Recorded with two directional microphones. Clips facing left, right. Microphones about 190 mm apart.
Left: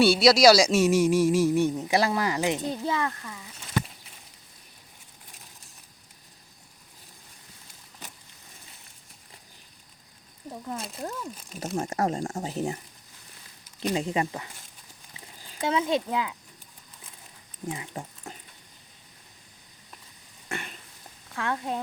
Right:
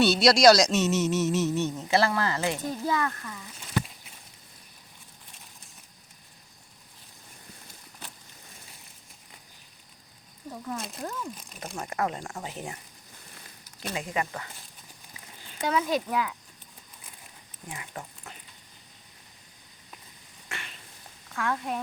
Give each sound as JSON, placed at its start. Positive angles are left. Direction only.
{"t": 0.0, "sound": "speech", "side_deg": 5}
{"t": 11.6, "sound": "speech", "side_deg": 40}
{"t": 13.9, "sound": "speech", "side_deg": 30}
{"t": 15.6, "sound": "speech", "side_deg": 25}
{"t": 17.7, "sound": "speech", "side_deg": 25}
{"t": 20.5, "sound": "cough", "side_deg": 45}
{"t": 21.3, "sound": "speech", "side_deg": 25}